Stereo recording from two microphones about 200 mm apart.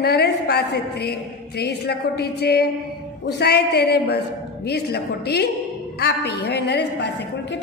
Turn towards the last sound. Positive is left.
turn(degrees=60)  # may be behind; listen again after turning